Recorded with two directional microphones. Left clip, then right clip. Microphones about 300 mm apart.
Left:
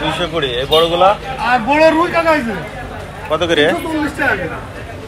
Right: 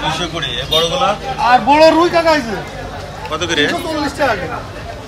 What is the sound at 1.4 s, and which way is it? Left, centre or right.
Speech, right.